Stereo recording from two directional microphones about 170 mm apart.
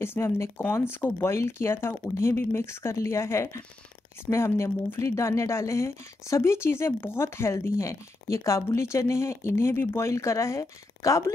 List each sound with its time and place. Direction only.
0.0 s speech: 15° left (ahead or behind)